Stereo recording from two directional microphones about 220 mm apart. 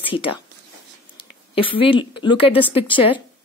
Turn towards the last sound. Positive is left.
turn(degrees=25)  # may be behind; listen again after turning